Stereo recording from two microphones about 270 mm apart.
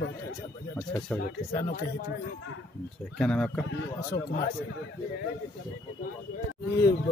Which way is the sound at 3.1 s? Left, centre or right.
Centre.